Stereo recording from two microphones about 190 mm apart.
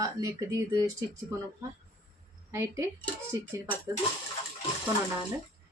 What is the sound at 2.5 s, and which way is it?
Speech, 15° right (ahead or behind).